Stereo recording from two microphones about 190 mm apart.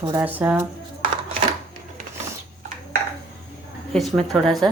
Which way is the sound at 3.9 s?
Centre (ahead or behind).